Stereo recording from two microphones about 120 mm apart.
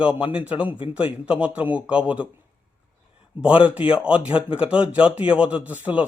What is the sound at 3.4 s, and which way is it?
A man's voice, 10° right (ahead or behind).